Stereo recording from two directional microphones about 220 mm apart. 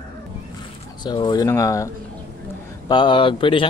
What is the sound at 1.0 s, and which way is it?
Speech, 20° left (ahead or behind).